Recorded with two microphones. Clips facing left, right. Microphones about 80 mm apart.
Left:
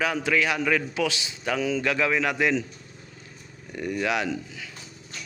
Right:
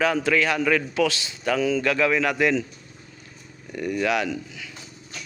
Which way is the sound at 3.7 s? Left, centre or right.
Centre.